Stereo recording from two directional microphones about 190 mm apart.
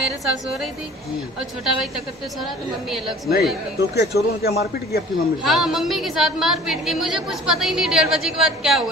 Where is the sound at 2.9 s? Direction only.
Centre (ahead or behind).